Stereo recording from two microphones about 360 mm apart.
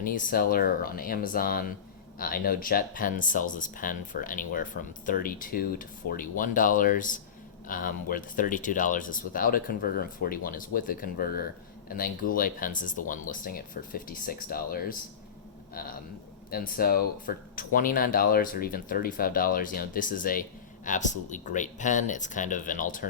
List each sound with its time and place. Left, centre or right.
0.0 s speech: left